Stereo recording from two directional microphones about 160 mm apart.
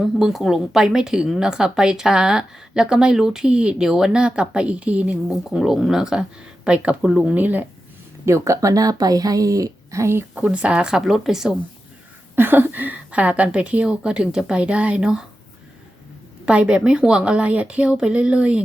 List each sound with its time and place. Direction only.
0.0 s speech: centre (ahead or behind)
16.5 s speech: 5° right (ahead or behind)